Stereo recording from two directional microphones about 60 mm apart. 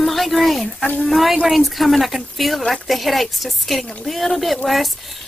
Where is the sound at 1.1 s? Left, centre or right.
Centre.